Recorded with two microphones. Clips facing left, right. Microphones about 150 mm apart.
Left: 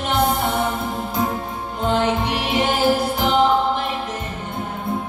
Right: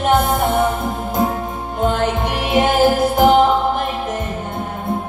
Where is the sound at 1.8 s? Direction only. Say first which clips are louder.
Right 2 dB; 50° right (ahead or behind).